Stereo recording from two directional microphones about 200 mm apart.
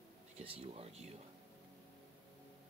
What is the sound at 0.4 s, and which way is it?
Speech, 30° right (ahead or behind).